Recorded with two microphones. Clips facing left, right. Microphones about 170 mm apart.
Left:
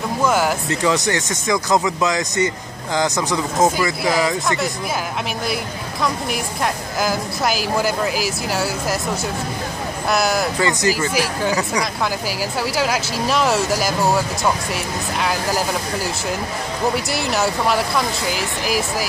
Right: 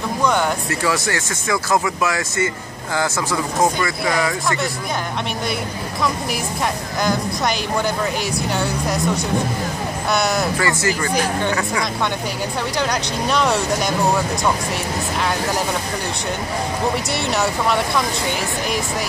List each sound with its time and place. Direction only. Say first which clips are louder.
0.2 s a sound: left 1 dB; 5° left (ahead or behind)
0.7 s speech: left 2 dB; 20° left (ahead or behind)
4.0 s a woman's voice: left 1 dB; centre (ahead or behind)
6.3 s a woman's voice: even; centre (ahead or behind)
10.6 s speech: left 1 dB; 20° left (ahead or behind)
11.0 s a woman's voice: even; 5° left (ahead or behind)
12.7 s a woman's voice: left 1 dB; 5° left (ahead or behind)
16.9 s a woman's voice: even; centre (ahead or behind)